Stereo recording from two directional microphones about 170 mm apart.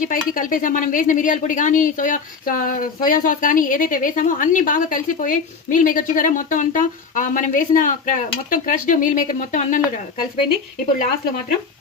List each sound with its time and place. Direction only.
0.0 s speech: 55° left (ahead or behind)